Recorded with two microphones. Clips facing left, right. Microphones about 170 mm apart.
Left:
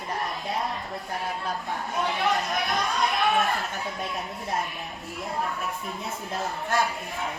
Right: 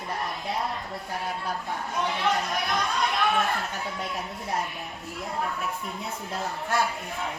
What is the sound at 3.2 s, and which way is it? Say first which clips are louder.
Speech: left 1 dB; centre (ahead or behind).